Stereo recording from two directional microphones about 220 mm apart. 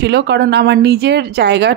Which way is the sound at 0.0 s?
50° right (ahead or behind).